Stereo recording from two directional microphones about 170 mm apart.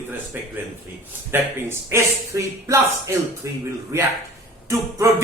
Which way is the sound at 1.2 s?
15° right (ahead or behind).